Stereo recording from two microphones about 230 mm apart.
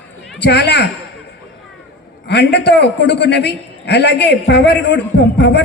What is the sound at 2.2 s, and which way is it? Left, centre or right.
A man's voice, left.